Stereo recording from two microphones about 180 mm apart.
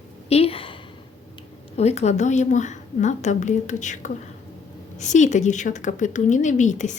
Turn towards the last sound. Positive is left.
turn(degrees=40)  # may be behind; listen again after turning